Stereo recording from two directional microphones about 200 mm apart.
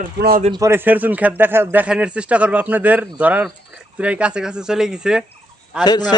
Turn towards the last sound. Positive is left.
turn(degrees=20)  # may be behind; listen again after turning